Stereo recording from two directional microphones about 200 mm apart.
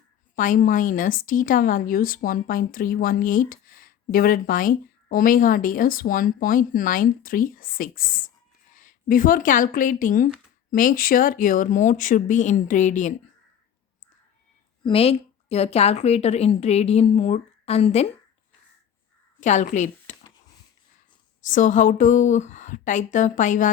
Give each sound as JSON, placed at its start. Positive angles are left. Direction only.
{"t": 0.3, "sound": "a woman's voice", "side_deg": 40}
{"t": 14.8, "sound": "a woman's voice", "side_deg": 30}
{"t": 19.4, "sound": "speech", "side_deg": 35}
{"t": 21.4, "sound": "a woman's voice", "side_deg": 40}